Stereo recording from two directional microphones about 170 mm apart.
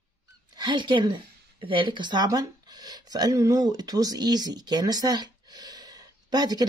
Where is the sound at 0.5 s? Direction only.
25° right (ahead or behind).